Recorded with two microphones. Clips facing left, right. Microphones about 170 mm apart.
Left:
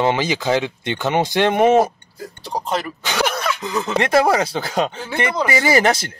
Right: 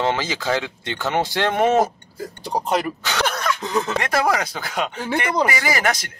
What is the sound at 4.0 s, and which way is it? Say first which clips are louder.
Speech: left 9 dB; 25° left (ahead or behind).